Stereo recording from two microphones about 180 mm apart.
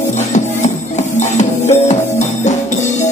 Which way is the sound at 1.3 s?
40° left (ahead or behind).